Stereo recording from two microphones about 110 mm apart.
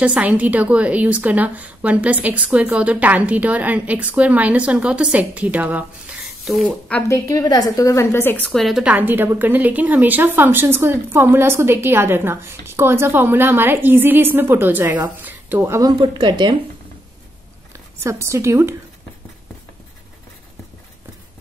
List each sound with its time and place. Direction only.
0.0 s a woman's voice: 10° right (ahead or behind)
7.0 s a woman's voice: 30° left (ahead or behind)
8.5 s a woman's voice: centre (ahead or behind)
8.8 s a woman's voice: 15° right (ahead or behind)
16.0 s speech: 45° right (ahead or behind)
17.7 s a woman's voice: 25° right (ahead or behind)